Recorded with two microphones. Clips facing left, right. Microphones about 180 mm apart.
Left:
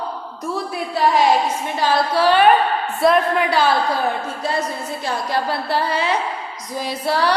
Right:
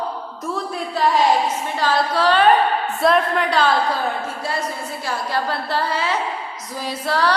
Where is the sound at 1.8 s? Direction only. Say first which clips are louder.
Left 2 dB; 10° left (ahead or behind).